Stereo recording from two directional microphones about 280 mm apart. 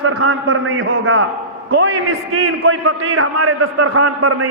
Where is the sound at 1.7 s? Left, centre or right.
Right.